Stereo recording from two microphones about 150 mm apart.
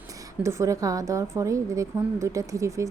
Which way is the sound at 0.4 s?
20° right (ahead or behind).